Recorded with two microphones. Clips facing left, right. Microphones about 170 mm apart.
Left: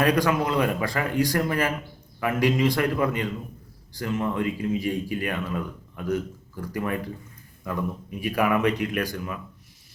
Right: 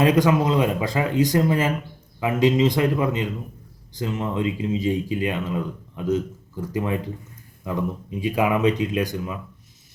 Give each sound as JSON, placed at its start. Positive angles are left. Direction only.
{"t": 0.0, "sound": "speech", "side_deg": -20}